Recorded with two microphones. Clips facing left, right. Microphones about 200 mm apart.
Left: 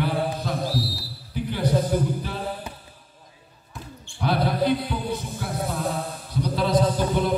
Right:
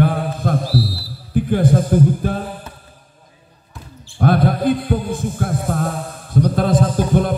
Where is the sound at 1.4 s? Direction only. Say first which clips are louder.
Right 6 dB; 50° right (ahead or behind).